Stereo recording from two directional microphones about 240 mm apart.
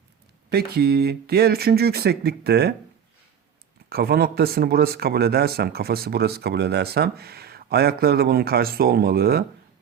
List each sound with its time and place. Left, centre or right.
0.5 s speech: right
3.8 s speech: right